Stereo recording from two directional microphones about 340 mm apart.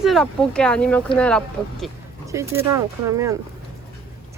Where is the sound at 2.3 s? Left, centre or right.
Centre.